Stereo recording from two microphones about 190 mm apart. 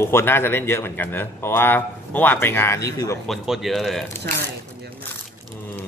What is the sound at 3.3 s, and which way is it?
Speech, centre (ahead or behind).